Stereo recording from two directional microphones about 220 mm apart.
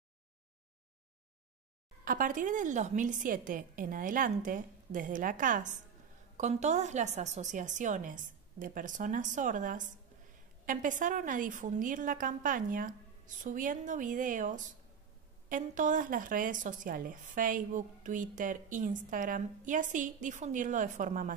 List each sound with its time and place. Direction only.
2.0 s speech: 40° right (ahead or behind)